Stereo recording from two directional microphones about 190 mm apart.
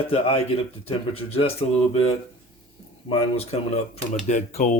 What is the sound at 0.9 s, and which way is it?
Speech, 30° left (ahead or behind).